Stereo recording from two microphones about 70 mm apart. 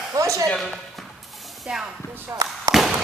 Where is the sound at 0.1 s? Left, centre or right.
Right.